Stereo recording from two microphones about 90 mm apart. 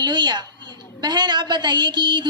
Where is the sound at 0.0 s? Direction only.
55° right (ahead or behind).